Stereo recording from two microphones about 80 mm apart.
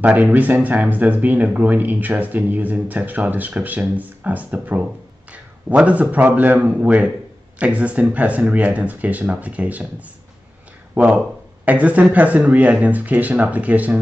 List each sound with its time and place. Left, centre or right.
0.0 s speech: right